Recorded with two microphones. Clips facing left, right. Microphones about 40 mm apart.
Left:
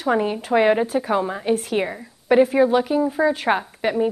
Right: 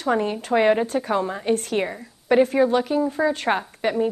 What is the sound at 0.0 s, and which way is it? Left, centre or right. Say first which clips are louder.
A woman's voice: left 2 dB; centre.